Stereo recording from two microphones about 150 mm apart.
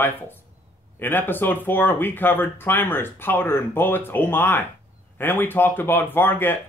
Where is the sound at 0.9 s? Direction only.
15° left (ahead or behind).